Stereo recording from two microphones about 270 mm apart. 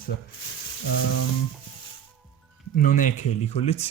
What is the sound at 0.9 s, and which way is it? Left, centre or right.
Frying, left.